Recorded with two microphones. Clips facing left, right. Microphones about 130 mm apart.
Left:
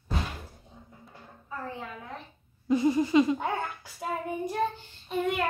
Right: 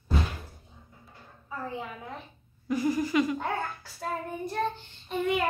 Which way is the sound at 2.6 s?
25° left (ahead or behind).